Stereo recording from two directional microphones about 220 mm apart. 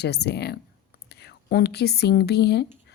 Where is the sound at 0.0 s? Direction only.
50° left (ahead or behind).